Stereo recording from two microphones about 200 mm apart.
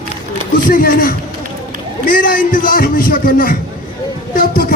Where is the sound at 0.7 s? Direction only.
45° left (ahead or behind).